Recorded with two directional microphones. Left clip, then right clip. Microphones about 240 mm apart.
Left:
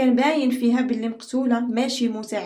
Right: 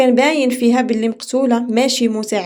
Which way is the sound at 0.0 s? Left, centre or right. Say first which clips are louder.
Right 7 dB; right.